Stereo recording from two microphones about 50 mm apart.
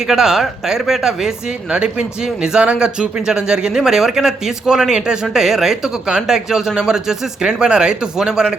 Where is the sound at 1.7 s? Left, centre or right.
Centre.